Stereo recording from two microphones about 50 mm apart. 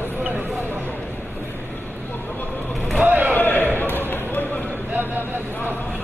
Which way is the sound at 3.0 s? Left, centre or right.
Right.